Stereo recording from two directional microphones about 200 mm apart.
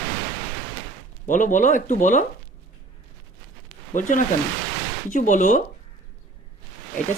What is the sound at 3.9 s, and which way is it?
Speech, 40° left (ahead or behind).